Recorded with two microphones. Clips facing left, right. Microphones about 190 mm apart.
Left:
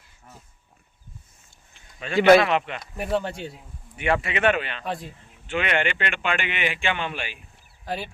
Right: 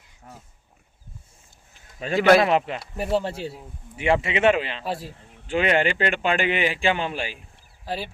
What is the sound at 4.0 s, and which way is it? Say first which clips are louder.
Speech: right 3 dB; 25° right (ahead or behind).